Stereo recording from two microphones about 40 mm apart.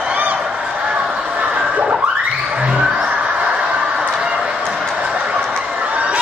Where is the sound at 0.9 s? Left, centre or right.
Right.